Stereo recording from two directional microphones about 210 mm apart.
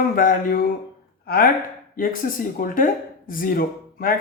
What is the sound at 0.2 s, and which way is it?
Speech, 40° left (ahead or behind).